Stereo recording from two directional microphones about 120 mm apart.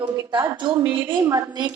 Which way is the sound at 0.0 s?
40° right (ahead or behind).